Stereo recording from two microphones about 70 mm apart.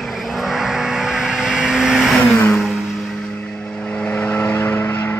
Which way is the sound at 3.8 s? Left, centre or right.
Centre.